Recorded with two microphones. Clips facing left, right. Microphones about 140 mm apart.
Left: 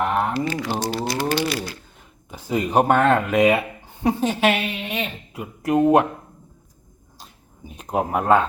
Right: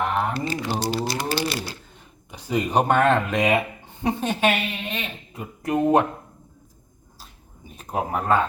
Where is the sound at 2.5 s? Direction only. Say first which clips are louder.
Left 2 dB; 5° left (ahead or behind).